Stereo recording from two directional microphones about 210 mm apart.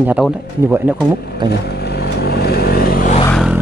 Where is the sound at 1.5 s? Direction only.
50° left (ahead or behind).